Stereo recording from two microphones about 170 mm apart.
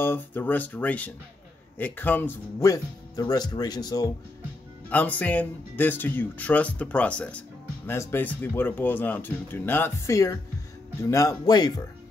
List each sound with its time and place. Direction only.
0.0 s speech: 10° left (ahead or behind)
4.8 s speech: 10° left (ahead or behind)